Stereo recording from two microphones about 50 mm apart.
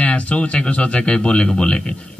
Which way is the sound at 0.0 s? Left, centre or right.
Left.